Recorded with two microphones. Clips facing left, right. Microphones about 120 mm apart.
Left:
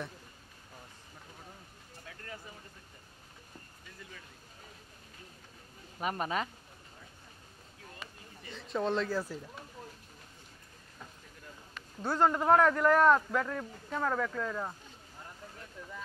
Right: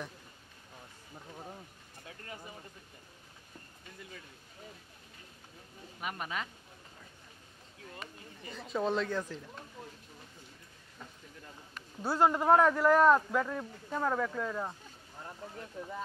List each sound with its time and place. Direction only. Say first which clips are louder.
5.9 s speech: left 5 dB; 40° left (ahead or behind)
8.5 s speech: even; centre (ahead or behind)
12.0 s speech: even; 10° right (ahead or behind)
15.8 s speech: right 6 dB; 45° right (ahead or behind)